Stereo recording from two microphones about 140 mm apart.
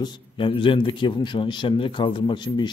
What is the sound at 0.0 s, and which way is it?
Speech, 35° left (ahead or behind).